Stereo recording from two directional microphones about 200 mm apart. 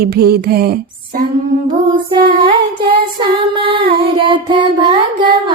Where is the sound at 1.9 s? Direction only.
25° right (ahead or behind).